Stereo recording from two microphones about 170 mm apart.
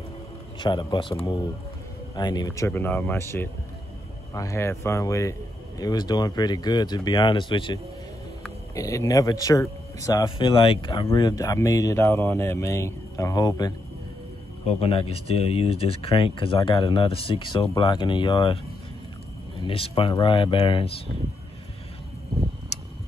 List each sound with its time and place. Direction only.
0.6 s speech: 25° left (ahead or behind)
2.1 s speech: 25° left (ahead or behind)
14.7 s speech: 35° left (ahead or behind)
19.6 s speech: 35° left (ahead or behind)